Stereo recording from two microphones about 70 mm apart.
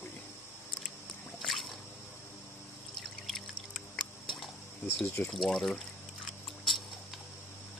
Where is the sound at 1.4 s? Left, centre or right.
Centre.